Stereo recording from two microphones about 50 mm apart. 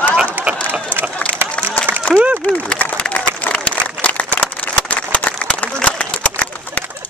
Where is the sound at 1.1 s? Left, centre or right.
Left.